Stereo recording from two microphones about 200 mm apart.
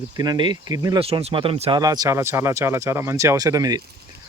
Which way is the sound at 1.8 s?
20° right (ahead or behind).